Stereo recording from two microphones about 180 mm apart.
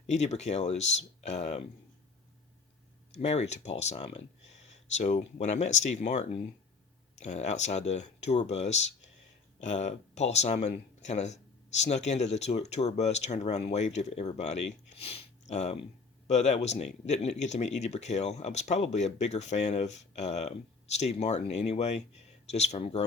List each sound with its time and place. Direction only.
0.1 s speech: 40° left (ahead or behind)
3.2 s speech: 35° left (ahead or behind)